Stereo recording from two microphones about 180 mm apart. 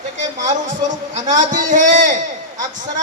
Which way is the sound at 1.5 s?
45° right (ahead or behind).